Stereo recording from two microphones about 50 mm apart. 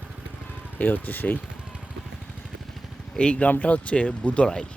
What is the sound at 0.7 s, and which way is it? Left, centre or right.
Speech, left.